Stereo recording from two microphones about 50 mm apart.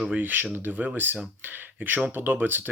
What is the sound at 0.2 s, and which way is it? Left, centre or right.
Speech, right.